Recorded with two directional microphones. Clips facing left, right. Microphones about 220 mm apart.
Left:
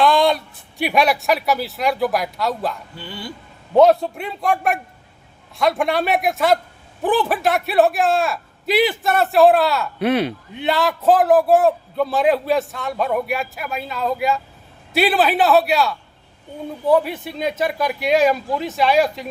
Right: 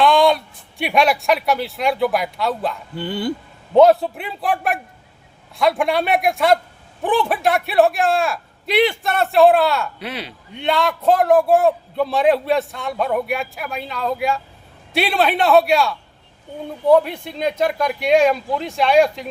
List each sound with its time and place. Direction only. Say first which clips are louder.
0.0 s speech: right 1 dB; centre (ahead or behind)
3.0 s speech: right 13 dB; 55° right (ahead or behind)
3.8 s a man's voice: right 1 dB; centre (ahead or behind)
10.0 s speech: left 12 dB; 50° left (ahead or behind)
10.5 s a man's voice: right 3 dB; 5° left (ahead or behind)